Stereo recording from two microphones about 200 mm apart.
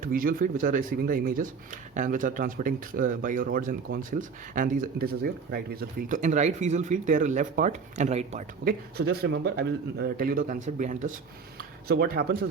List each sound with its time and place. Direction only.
0.0 s speech: 45° right (ahead or behind)
8.6 s speech: 50° right (ahead or behind)